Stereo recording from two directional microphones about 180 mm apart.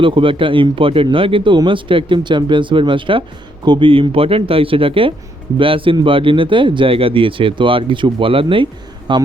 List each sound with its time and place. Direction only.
0.0 s speech: 30° right (ahead or behind)